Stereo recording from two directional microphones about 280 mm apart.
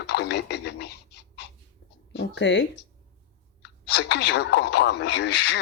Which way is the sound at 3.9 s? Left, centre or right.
Left.